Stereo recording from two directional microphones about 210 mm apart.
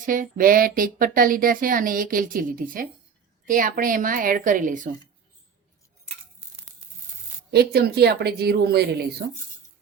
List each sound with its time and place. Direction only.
0.0 s speech: 40° right (ahead or behind)
7.5 s a woman's voice: 50° right (ahead or behind)